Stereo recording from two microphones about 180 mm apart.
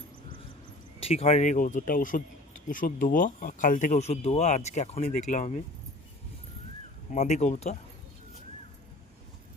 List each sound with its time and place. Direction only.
0.9 s speech: 35° left (ahead or behind)
7.1 s speech: 40° left (ahead or behind)